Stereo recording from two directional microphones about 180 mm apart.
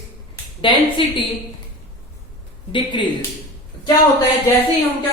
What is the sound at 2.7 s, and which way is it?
Speech, 25° left (ahead or behind).